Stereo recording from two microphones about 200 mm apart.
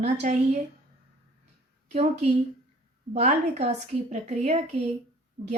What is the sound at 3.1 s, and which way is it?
A woman's voice, 35° right (ahead or behind).